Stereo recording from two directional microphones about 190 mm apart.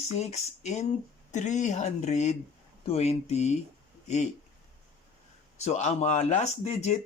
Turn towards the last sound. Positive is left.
turn(degrees=35)  # may be behind; listen again after turning